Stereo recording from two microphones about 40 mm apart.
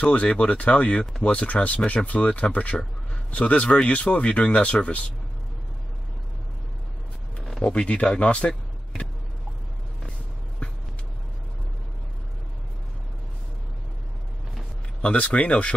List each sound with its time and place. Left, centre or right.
0.0 s speech: left
7.3 s a sound: centre
7.6 s speech: left
15.0 s speech: left